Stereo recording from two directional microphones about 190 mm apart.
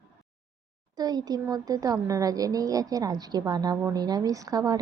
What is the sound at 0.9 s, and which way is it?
A woman's voice, 20° right (ahead or behind).